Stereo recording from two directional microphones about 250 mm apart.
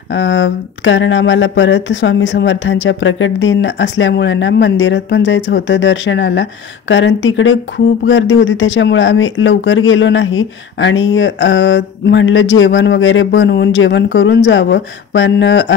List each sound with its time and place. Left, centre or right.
0.1 s speech: left